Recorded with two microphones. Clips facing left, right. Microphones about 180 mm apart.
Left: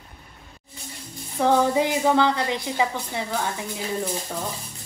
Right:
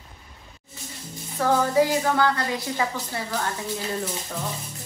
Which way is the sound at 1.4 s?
20° left (ahead or behind).